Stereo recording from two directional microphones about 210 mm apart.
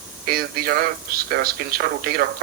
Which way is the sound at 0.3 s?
45° right (ahead or behind).